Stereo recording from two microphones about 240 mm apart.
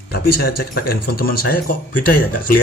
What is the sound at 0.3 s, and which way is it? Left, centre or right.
Speech, left.